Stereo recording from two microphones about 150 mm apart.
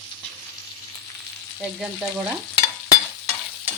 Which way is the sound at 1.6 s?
5° right (ahead or behind).